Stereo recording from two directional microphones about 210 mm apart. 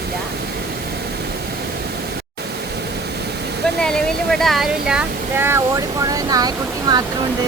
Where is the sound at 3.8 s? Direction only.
Centre (ahead or behind); by 7.0 s 20° right (ahead or behind).